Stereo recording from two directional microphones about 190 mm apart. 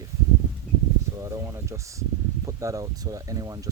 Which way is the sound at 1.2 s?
15° right (ahead or behind).